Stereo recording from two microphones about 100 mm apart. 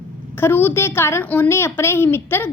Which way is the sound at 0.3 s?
20° left (ahead or behind).